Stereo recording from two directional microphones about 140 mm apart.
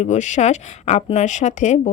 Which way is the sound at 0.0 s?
55° left (ahead or behind).